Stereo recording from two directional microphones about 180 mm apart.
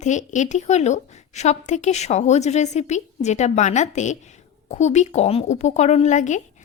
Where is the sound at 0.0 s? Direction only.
40° left (ahead or behind).